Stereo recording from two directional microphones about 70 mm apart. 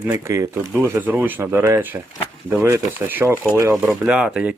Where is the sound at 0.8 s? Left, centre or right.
Right.